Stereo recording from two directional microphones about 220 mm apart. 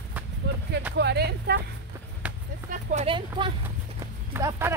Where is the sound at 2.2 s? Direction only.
5° right (ahead or behind).